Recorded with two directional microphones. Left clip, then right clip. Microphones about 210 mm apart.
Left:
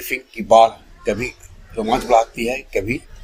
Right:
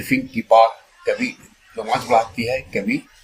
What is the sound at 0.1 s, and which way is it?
Speech, 45° left (ahead or behind).